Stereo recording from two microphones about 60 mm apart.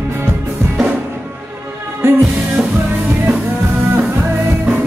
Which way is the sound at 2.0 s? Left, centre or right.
Right.